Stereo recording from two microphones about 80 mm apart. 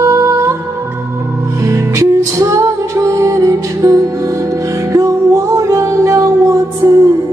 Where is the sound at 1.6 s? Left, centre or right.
Right.